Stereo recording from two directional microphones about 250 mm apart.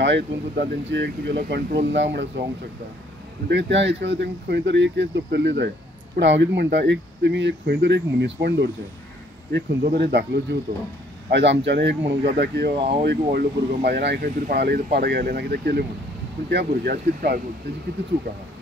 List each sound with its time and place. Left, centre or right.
0.0 s speech: right
3.4 s speech: right
9.8 s speech: right
12.7 s speech: right
13.0 s speech: right